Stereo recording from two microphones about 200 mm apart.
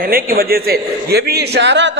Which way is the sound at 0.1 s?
50° right (ahead or behind).